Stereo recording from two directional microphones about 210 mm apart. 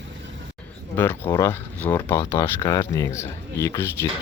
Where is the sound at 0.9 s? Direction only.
10° left (ahead or behind).